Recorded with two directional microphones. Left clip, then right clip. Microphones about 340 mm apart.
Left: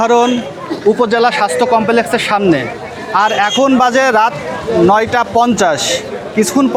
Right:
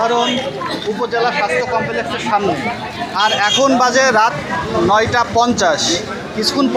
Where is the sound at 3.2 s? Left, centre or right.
Left.